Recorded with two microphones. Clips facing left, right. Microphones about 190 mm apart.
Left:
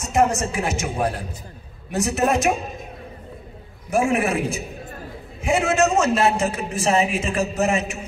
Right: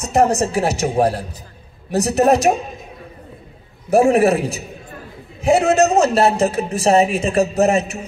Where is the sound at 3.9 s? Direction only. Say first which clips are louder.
Right 7 dB; 40° right (ahead or behind).